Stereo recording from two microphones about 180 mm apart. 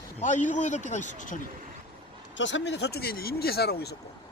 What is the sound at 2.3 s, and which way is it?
Speech, 90° left.